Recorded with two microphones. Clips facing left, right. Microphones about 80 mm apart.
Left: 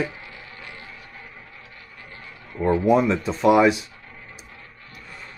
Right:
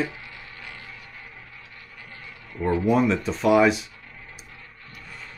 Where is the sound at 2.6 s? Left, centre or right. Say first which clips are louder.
Left 2 dB; centre.